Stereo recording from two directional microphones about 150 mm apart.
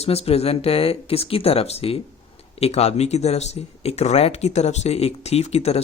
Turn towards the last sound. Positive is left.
turn(degrees=45)  # may be behind; listen again after turning